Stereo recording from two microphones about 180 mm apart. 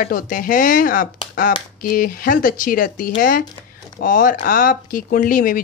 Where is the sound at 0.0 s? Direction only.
50° left (ahead or behind).